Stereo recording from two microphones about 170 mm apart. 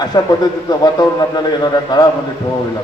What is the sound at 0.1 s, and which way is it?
A man's voice, 25° left (ahead or behind).